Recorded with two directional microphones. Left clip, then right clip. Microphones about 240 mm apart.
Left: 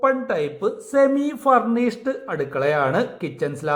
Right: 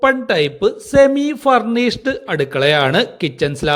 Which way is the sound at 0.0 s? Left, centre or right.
Right.